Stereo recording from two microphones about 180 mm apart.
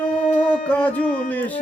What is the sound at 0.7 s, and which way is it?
Music, 10° left (ahead or behind).